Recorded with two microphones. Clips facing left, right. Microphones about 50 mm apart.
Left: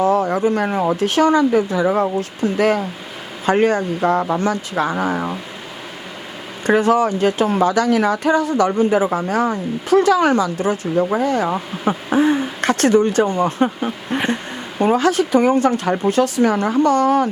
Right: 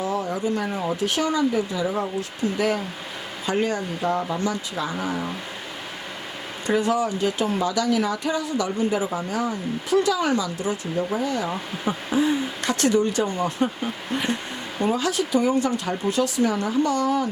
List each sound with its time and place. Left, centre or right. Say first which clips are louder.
0.0 s speech: left 9 dB; left
6.7 s speech: left 7 dB; left